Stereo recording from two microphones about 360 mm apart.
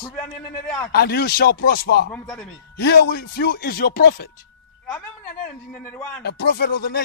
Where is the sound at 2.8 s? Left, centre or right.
Left.